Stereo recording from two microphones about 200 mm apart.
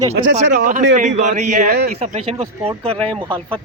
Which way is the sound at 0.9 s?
40° right (ahead or behind).